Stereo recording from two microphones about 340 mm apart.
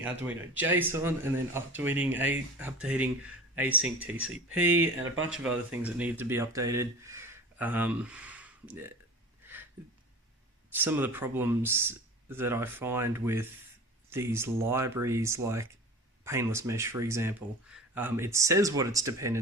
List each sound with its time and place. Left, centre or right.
0.0 s speech: centre
10.8 s speech: centre